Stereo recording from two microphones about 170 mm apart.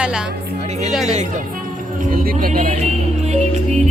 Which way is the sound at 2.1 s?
60° right (ahead or behind).